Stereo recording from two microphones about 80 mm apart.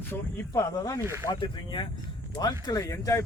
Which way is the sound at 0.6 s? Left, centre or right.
Left.